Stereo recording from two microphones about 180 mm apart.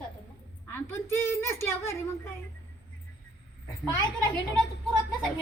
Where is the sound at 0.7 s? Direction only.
15° left (ahead or behind).